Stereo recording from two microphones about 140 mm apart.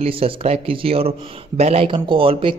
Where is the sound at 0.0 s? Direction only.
40° right (ahead or behind).